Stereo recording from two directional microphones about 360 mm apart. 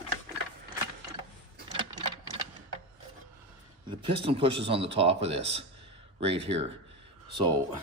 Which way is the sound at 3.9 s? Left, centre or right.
Centre.